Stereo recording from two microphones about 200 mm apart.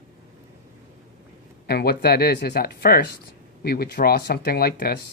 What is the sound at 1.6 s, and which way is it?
Speech, 50° left (ahead or behind).